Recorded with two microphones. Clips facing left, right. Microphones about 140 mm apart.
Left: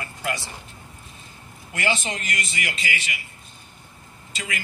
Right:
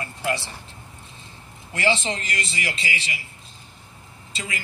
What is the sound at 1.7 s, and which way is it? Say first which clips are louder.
A man's voice: right 3 dB; 30° right (ahead or behind).